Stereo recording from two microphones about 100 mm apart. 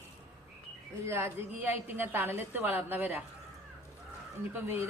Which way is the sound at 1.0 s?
25° right (ahead or behind).